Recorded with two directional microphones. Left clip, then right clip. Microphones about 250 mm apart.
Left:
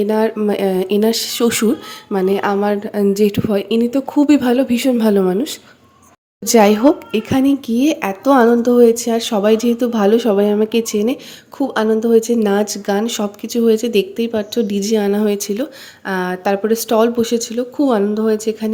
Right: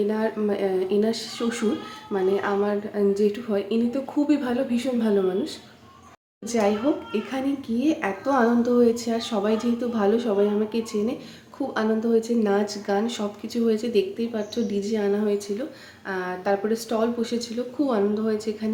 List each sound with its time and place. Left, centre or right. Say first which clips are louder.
0.1 s speech: left 9 dB; left